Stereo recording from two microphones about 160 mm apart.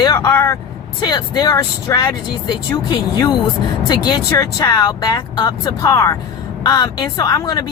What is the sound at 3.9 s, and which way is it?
Speech, 25° left (ahead or behind).